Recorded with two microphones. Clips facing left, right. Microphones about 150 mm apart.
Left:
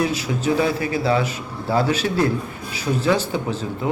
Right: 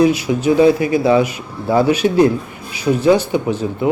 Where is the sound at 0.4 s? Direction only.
15° right (ahead or behind).